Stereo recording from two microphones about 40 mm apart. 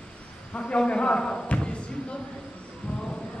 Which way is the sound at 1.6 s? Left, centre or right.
Left.